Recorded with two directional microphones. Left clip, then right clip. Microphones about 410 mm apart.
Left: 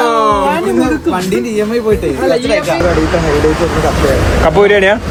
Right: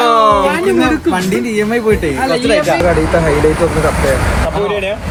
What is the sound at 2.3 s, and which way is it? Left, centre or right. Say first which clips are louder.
Speech: right 1 dB; centre.